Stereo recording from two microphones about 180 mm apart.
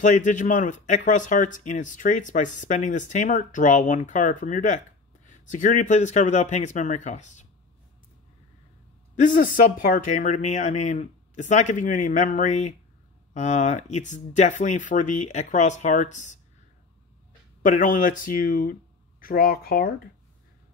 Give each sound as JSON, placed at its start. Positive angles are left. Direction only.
{"t": 0.0, "sound": "speech", "side_deg": 45}
{"t": 9.1, "sound": "speech", "side_deg": 45}
{"t": 17.6, "sound": "speech", "side_deg": 45}